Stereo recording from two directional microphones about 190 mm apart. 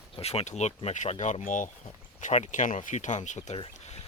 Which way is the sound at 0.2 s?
35° left (ahead or behind).